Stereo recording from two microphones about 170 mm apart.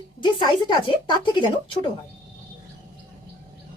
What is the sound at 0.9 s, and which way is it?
Speech, 25° left (ahead or behind).